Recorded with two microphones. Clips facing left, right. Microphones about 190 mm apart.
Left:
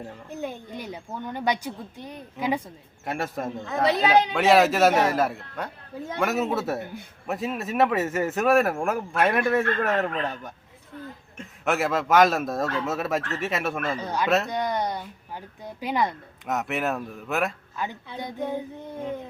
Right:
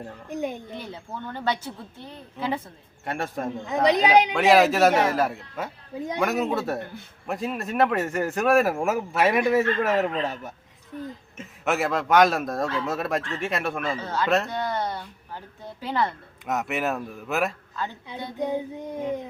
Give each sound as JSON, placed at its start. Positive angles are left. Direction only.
{"t": 0.3, "sound": "child singing", "side_deg": -15}
{"t": 0.7, "sound": "speech", "side_deg": 15}
{"t": 3.0, "sound": "speech", "side_deg": 0}
{"t": 3.7, "sound": "child singing", "side_deg": -15}
{"t": 4.4, "sound": "speech", "side_deg": 0}
{"t": 13.9, "sound": "speech", "side_deg": 15}
{"t": 16.5, "sound": "speech", "side_deg": 0}
{"t": 17.8, "sound": "speech", "side_deg": 15}
{"t": 18.3, "sound": "child singing", "side_deg": -15}